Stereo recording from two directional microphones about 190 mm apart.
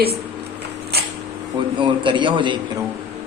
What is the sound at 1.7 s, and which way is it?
Speech, 25° right (ahead or behind).